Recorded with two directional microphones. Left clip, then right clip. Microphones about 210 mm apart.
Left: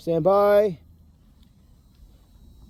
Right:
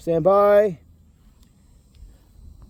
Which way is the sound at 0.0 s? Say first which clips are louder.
Right 2 dB; 10° right (ahead or behind).